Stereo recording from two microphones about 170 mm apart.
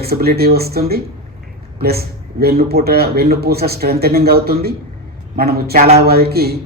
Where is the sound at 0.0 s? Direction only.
65° right (ahead or behind).